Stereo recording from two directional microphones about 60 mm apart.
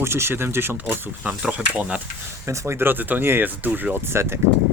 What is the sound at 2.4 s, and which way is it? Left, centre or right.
Speech, right.